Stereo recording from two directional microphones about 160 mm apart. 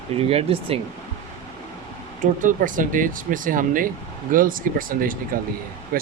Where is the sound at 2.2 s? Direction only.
55° right (ahead or behind).